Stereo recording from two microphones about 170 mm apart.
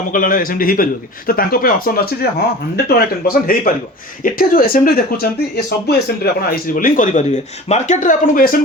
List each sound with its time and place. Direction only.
0.1 s speech: 55° left (ahead or behind)
6.7 s speech: 55° left (ahead or behind)